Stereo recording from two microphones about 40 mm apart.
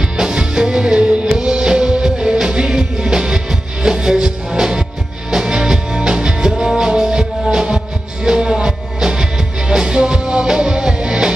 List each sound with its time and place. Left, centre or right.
0.2 s music: centre